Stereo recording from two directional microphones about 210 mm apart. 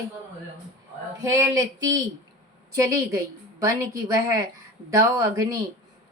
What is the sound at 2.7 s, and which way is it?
Speech, 15° right (ahead or behind).